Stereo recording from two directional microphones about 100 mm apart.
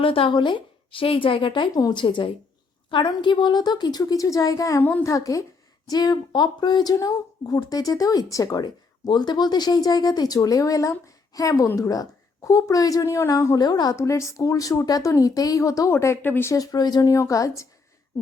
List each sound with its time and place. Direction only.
0.0 s a woman's voice: 65° left (ahead or behind)
1.7 s a woman's voice: 45° left (ahead or behind)
4.8 s a woman's voice: 20° left (ahead or behind)
5.0 s speech: 35° left (ahead or behind)
13.9 s speech: 30° left (ahead or behind)
16.6 s speech: 40° left (ahead or behind)